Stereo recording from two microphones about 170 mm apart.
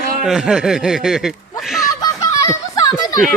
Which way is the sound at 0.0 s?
55° right (ahead or behind).